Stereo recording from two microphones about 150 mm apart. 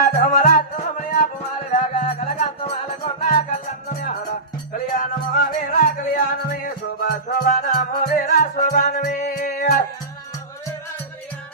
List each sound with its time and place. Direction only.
0.0 s music: 80° left; by 1.3 s 65° left (ahead or behind)
1.7 s music: 55° left (ahead or behind)
3.8 s music: 75° left (ahead or behind)